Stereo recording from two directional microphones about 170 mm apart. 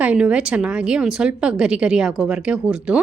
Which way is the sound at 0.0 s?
5° right (ahead or behind).